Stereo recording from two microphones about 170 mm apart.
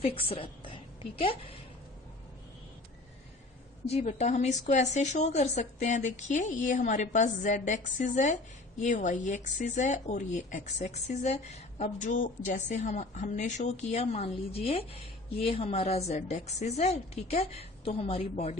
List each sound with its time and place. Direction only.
0.0 s a woman's voice: 30° left (ahead or behind)
3.8 s a woman's voice: 40° left (ahead or behind)